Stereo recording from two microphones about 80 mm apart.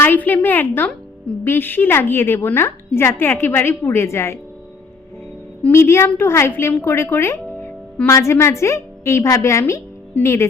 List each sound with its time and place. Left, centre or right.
0.0 s a woman's voice: left
5.7 s a woman's voice: left